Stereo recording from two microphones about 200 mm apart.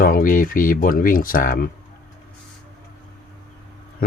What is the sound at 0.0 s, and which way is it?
Speech, 45° left (ahead or behind).